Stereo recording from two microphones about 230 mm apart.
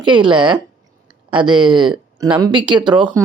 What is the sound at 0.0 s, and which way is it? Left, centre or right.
Speech, right.